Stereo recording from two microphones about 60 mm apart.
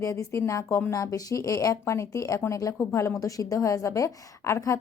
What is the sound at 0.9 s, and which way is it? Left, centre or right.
Speech, left.